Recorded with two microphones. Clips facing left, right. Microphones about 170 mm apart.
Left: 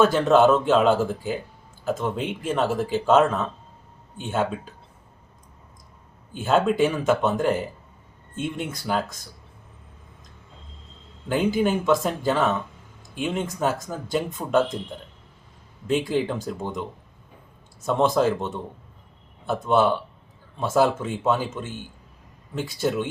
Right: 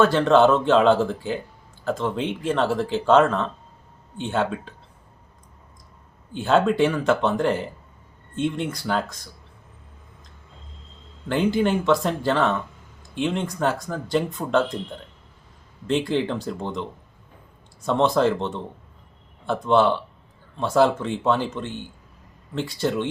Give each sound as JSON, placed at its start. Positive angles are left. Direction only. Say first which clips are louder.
{"t": 0.0, "sound": "speech", "louder": "right 1 dB", "side_deg": 5}
{"t": 6.3, "sound": "speech", "louder": "right 1 dB", "side_deg": 5}
{"t": 11.3, "sound": "speech", "louder": "right 1 dB", "side_deg": 5}
{"t": 15.9, "sound": "speech", "louder": "right 1 dB", "side_deg": 10}
{"t": 17.8, "sound": "speech", "louder": "right 1 dB", "side_deg": 5}